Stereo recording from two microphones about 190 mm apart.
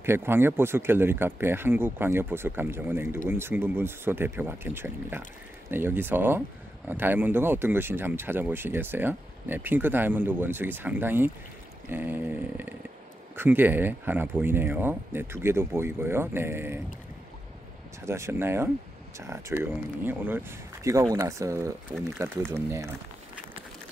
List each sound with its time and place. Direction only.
0.0 s speech: 10° right (ahead or behind)
18.0 s speech: 15° right (ahead or behind)